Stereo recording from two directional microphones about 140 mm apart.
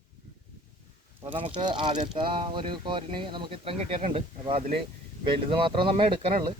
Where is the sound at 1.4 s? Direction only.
35° right (ahead or behind).